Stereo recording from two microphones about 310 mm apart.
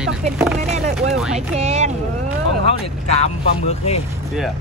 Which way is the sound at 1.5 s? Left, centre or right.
Right.